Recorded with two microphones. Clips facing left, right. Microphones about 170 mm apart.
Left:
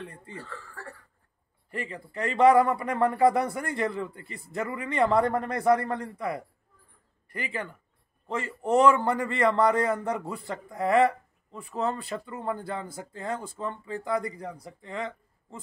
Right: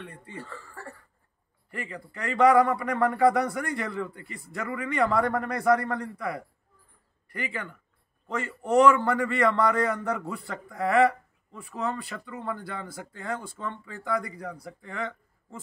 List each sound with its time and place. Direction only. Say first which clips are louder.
0.0 s speech: left 2 dB; 30° left (ahead or behind)
0.4 s speech: right 2 dB; 10° right (ahead or behind)
1.7 s a man's voice: left 2 dB; 30° left (ahead or behind)
8.4 s a man's voice: right 1 dB; 30° left (ahead or behind)